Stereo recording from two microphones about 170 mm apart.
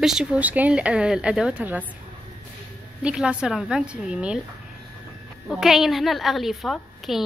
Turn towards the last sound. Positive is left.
turn(degrees=0)  # may be behind; listen again after turning